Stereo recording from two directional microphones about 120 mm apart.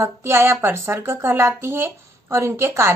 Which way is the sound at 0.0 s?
20° right (ahead or behind).